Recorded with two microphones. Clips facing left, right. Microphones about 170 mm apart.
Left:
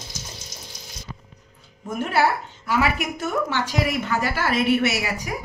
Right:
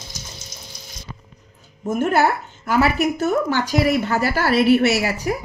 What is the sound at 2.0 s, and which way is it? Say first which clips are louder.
A woman's voice: right 3 dB; 45° right (ahead or behind).